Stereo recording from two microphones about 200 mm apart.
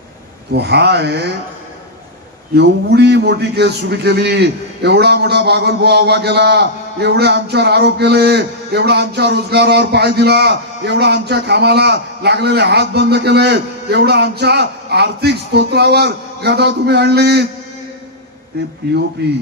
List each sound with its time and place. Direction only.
0.5 s a man's voice: 55° right (ahead or behind)
2.5 s a man's voice: 55° right (ahead or behind)
19.2 s speech: 55° right (ahead or behind)